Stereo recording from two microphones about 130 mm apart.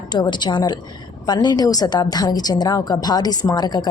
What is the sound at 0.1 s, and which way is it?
A woman's voice, 35° left (ahead or behind).